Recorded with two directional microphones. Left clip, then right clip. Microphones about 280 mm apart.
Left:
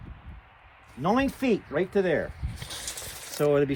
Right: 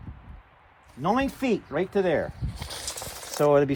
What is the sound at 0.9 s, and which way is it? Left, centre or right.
Speech, centre.